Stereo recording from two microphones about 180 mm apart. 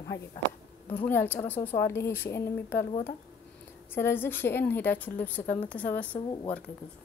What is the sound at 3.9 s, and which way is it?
Speech, 10° left (ahead or behind).